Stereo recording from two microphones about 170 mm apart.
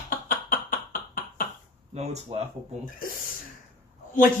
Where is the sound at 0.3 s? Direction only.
55° left (ahead or behind).